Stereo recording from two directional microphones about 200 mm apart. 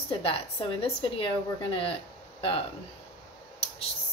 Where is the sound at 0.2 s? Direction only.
30° left (ahead or behind).